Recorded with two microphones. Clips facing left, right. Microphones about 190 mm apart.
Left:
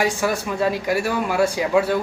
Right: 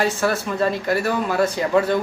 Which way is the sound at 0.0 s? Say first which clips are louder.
Right 1 dB; 15° left (ahead or behind).